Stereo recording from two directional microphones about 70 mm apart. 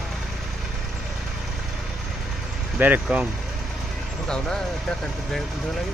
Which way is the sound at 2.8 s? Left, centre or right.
Right.